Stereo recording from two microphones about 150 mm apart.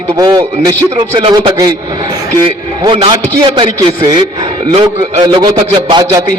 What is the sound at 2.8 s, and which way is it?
Speech, 30° right (ahead or behind).